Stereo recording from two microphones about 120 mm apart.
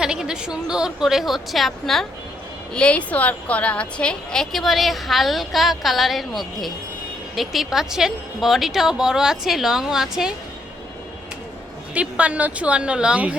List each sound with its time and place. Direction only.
0.0 s a woman's voice: 5° right (ahead or behind)
11.9 s a woman's voice: 10° right (ahead or behind)